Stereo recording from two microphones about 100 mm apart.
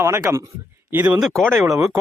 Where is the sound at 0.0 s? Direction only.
30° right (ahead or behind).